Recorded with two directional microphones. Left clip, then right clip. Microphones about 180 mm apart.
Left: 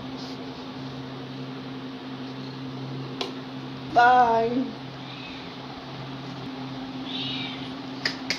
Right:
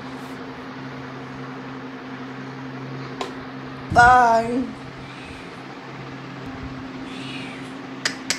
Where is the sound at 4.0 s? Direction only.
30° right (ahead or behind).